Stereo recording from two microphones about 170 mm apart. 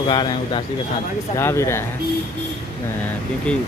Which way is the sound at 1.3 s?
15° left (ahead or behind).